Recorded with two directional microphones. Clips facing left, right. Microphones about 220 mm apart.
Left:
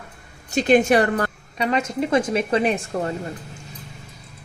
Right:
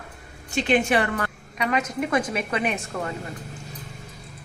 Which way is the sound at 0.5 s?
40° left (ahead or behind).